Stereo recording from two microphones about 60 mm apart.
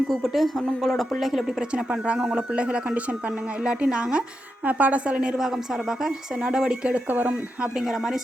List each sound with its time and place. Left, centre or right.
0.1 s a woman's voice: centre
4.6 s a woman's voice: right
5.4 s speech: centre
6.9 s a woman's voice: right
7.6 s speech: centre